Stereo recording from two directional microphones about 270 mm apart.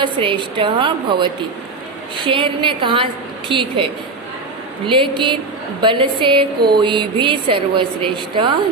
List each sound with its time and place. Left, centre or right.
0.0 s a woman's voice: centre
4.9 s a woman's voice: centre